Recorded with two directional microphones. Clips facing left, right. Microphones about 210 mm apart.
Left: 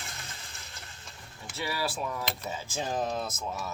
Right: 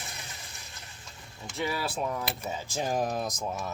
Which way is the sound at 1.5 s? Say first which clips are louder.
Right 1 dB; 20° right (ahead or behind).